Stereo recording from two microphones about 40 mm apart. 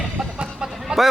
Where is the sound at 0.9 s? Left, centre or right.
Centre.